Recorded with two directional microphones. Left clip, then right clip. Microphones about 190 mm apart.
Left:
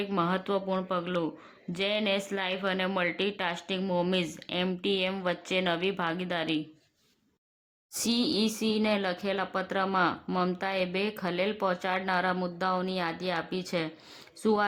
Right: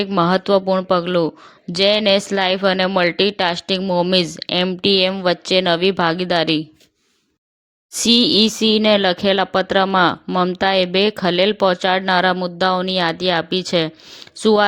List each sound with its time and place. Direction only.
0.2 s speech: 40° right (ahead or behind)
7.9 s speech: 40° right (ahead or behind)